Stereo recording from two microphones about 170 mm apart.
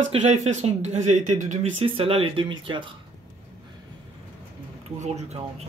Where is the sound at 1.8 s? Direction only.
35° right (ahead or behind).